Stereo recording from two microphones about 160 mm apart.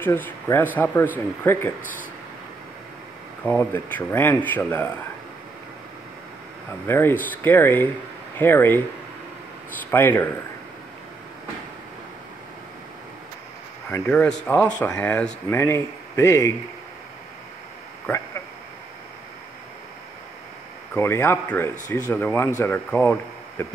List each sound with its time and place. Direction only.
0.0 s speech: 15° left (ahead or behind)
3.4 s speech: 10° left (ahead or behind)
6.9 s speech: 15° left (ahead or behind)
9.8 s speech: 10° left (ahead or behind)
13.8 s speech: 10° left (ahead or behind)
20.9 s speech: 15° left (ahead or behind)